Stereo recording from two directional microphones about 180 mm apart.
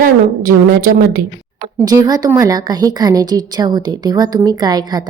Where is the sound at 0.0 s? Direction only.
55° right (ahead or behind).